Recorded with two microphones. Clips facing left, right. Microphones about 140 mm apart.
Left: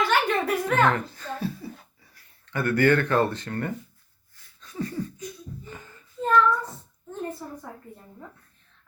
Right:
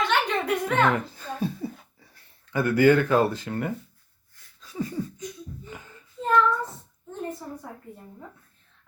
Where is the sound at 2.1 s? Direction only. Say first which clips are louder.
Right 3 dB; 15° right (ahead or behind).